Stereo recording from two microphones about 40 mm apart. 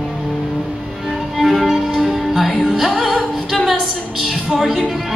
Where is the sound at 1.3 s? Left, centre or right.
Centre.